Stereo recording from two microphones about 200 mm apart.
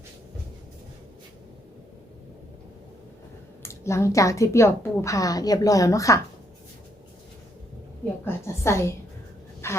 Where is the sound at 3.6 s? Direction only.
15° left (ahead or behind).